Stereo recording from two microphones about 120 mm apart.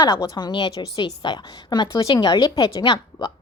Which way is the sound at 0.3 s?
40° left (ahead or behind).